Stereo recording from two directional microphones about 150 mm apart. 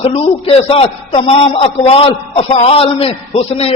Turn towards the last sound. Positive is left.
turn(degrees=40)  # may be behind; listen again after turning